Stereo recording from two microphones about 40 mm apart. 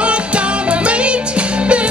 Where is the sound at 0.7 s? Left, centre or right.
Right.